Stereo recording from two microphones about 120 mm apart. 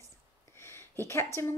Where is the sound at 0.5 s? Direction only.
20° left (ahead or behind).